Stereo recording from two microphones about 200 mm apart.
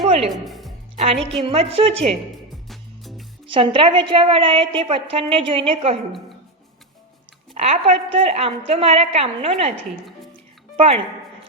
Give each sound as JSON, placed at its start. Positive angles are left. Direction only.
{"t": 0.0, "sound": "music", "side_deg": -30}
{"t": 0.3, "sound": "speech", "side_deg": 0}
{"t": 1.0, "sound": "a woman's voice", "side_deg": -30}
{"t": 2.3, "sound": "music", "side_deg": 0}
{"t": 3.4, "sound": "a woman's voice", "side_deg": -25}
{"t": 7.5, "sound": "a woman's voice", "side_deg": -30}
{"t": 10.8, "sound": "a woman's voice", "side_deg": -30}